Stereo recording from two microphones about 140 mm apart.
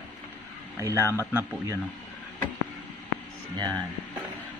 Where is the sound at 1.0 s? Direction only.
20° left (ahead or behind).